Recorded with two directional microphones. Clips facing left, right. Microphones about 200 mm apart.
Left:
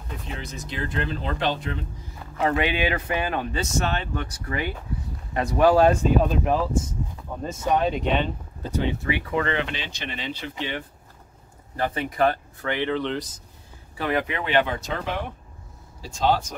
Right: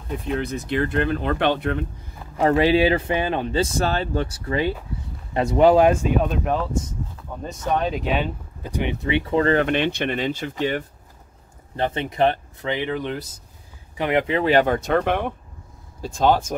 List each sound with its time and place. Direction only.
0.2 s speech: 60° right (ahead or behind)
2.3 s speech: 35° right (ahead or behind); by 5.9 s 20° right (ahead or behind)
6.2 s speech: centre (ahead or behind)
7.3 s a sound: 5° left (ahead or behind)
7.7 s speech: centre (ahead or behind); by 9.7 s 40° right (ahead or behind)
9.7 s speech: 60° right (ahead or behind)
11.7 s speech: 25° right (ahead or behind); by 13.4 s 10° right (ahead or behind)
13.9 s speech: 20° right (ahead or behind); by 16.5 s 50° right (ahead or behind)